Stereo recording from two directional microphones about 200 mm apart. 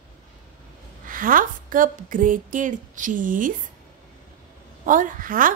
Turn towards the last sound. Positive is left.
turn(degrees=-45)  # may be behind; listen again after turning